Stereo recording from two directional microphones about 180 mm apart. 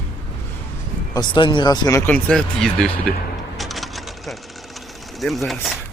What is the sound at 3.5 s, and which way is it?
Sewing machine, centre (ahead or behind).